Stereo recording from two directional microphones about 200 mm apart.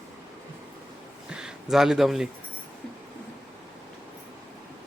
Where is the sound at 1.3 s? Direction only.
5° right (ahead or behind).